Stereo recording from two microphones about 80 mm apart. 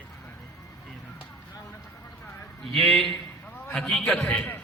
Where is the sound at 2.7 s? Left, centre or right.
Centre.